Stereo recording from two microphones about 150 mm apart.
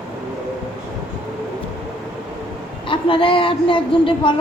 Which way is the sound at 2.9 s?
35° left (ahead or behind).